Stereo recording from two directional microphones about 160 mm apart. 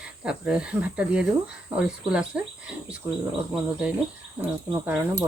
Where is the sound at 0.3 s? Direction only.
5° right (ahead or behind).